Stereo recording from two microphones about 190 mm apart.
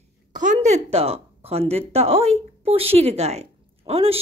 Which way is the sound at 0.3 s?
40° right (ahead or behind).